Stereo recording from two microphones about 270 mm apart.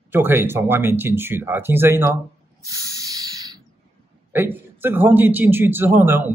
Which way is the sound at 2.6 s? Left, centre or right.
Centre.